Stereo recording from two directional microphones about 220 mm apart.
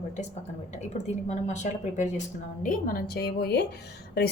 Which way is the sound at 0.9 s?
30° left (ahead or behind).